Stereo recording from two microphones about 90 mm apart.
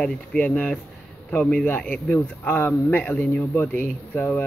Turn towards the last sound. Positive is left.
turn(degrees=20)  # may be behind; listen again after turning